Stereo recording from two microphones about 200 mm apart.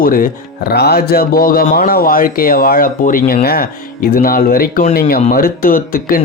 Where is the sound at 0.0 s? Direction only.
45° left (ahead or behind).